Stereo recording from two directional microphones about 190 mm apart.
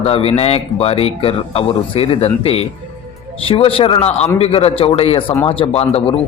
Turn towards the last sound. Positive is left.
turn(degrees=30)  # may be behind; listen again after turning